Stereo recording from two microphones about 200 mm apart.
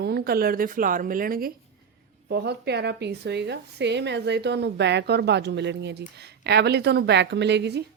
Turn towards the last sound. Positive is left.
turn(degrees=-55)  # may be behind; listen again after turning